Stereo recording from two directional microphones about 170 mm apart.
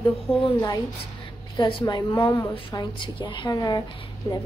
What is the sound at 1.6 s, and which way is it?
A woman's voice, 30° left (ahead or behind).